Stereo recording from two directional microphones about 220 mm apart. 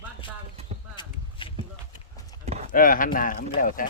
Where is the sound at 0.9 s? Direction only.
20° left (ahead or behind).